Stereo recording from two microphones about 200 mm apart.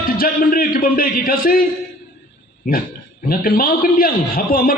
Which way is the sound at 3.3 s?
45° left (ahead or behind).